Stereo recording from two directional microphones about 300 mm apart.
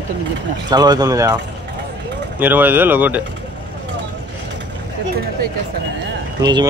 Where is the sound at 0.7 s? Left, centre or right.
Centre.